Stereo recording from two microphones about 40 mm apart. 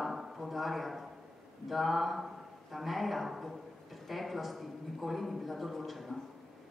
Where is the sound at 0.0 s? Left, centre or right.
Centre.